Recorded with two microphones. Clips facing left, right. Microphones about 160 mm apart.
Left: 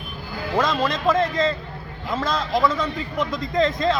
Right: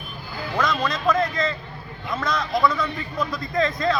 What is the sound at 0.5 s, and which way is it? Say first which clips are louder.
A man's voice: left 2 dB; 25° left (ahead or behind).